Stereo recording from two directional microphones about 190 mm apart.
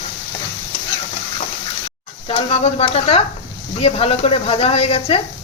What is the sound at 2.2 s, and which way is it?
Speech, 30° left (ahead or behind).